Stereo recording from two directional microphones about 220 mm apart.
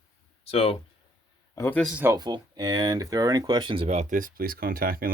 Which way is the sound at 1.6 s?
5° left (ahead or behind).